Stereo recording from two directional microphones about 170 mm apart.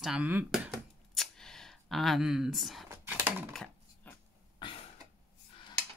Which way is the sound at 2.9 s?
10° right (ahead or behind).